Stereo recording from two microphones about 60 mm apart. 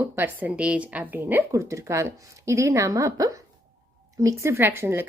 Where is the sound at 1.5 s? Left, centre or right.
Right.